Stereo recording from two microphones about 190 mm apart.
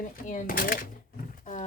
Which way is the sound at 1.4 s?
45° left (ahead or behind).